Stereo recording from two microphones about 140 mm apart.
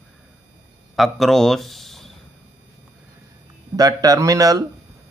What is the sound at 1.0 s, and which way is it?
Speech, centre (ahead or behind).